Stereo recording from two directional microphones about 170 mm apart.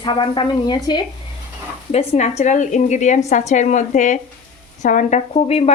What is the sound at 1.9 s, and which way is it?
A woman's voice, 40° left (ahead or behind).